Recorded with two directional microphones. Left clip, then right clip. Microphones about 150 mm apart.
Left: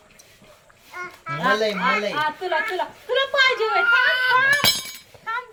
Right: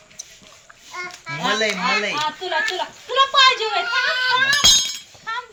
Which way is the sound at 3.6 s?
25° left (ahead or behind).